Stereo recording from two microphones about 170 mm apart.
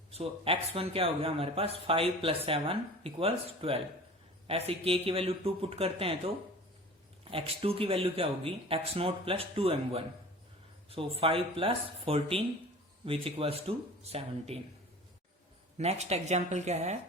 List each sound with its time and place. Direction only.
0.1 s speech: 35° right (ahead or behind)
15.8 s speech: 40° right (ahead or behind)